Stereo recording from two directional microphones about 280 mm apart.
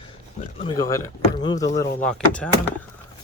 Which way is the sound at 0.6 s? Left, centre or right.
Centre.